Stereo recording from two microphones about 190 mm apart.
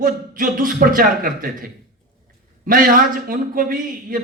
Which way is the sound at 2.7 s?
45° right (ahead or behind).